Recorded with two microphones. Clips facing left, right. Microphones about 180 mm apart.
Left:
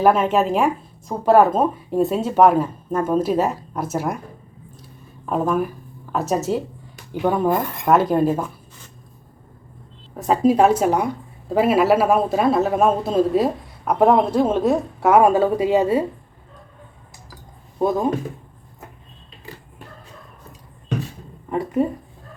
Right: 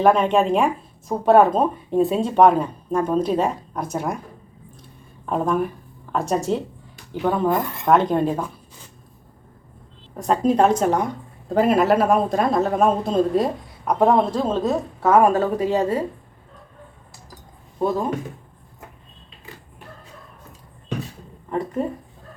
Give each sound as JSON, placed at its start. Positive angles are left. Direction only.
{"t": 0.0, "sound": "speech", "side_deg": 5}
{"t": 4.8, "sound": "a sound", "side_deg": 5}
{"t": 7.1, "sound": "a woman's voice", "side_deg": 10}
{"t": 10.2, "sound": "a woman's voice", "side_deg": 5}
{"t": 21.5, "sound": "speech", "side_deg": 10}